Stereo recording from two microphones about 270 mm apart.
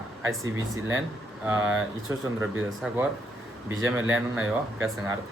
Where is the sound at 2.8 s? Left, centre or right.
Centre.